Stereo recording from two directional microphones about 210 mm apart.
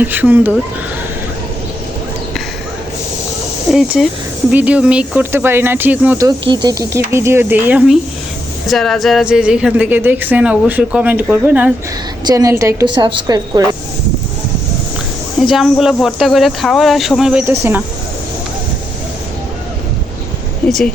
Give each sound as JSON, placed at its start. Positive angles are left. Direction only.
{"t": 0.0, "sound": "a woman's voice", "side_deg": -10}
{"t": 3.7, "sound": "a woman's voice", "side_deg": 0}
{"t": 15.4, "sound": "speech", "side_deg": 0}
{"t": 20.7, "sound": "speech", "side_deg": 0}